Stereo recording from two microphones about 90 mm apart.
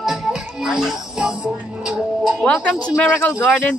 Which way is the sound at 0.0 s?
Centre (ahead or behind).